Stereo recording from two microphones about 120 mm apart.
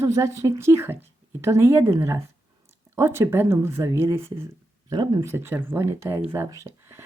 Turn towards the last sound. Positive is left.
turn(degrees=-25)  # may be behind; listen again after turning